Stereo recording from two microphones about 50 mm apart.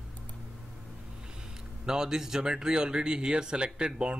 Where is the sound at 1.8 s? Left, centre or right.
Centre.